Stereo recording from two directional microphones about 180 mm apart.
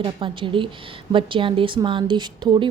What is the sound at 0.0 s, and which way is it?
A woman's voice, 30° right (ahead or behind).